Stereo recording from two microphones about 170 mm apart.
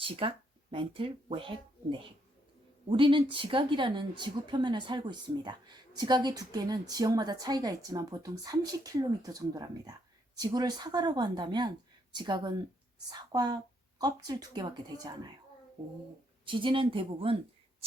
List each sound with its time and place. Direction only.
0.0 s a woman's voice: 30° right (ahead or behind)
16.5 s speech: 30° right (ahead or behind)